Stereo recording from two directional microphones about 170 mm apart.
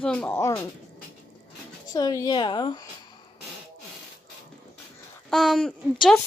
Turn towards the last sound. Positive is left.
turn(degrees=5)  # may be behind; listen again after turning